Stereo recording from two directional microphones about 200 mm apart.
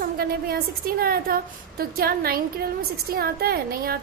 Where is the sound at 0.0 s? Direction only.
50° right (ahead or behind).